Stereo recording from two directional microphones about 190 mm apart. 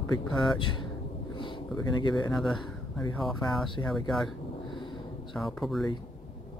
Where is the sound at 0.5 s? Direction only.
25° left (ahead or behind).